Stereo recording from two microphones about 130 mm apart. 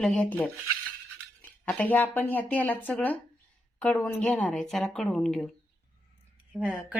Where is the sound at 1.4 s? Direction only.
10° left (ahead or behind).